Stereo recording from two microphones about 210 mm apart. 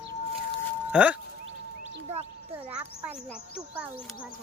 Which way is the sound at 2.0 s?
30° right (ahead or behind).